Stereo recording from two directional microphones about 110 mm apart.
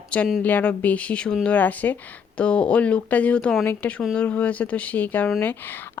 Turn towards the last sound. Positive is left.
turn(degrees=20)  # may be behind; listen again after turning